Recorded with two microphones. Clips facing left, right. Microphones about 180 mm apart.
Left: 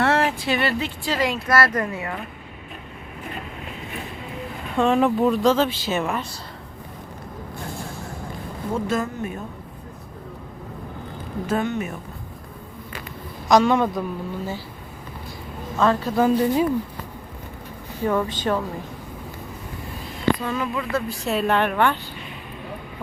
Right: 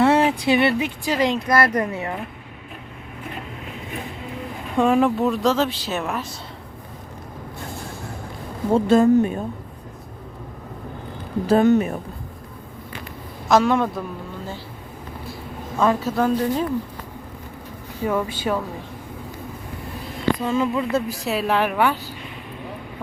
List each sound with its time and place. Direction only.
0.0 s speech: 15° right (ahead or behind)
4.8 s speech: 10° right (ahead or behind)
8.7 s speech: 30° right (ahead or behind)
11.4 s speech: 35° right (ahead or behind)
13.5 s speech: centre (ahead or behind)
15.8 s speech: 10° right (ahead or behind)
16.1 s a woman's voice: 10° left (ahead or behind)
18.0 s speech: 5° right (ahead or behind)
20.4 s speech: 25° right (ahead or behind)
21.2 s speech: centre (ahead or behind)